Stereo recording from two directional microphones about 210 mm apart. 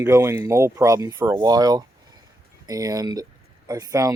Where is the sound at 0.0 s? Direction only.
15° right (ahead or behind).